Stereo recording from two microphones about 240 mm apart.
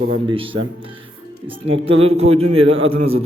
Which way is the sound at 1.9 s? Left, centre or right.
Right.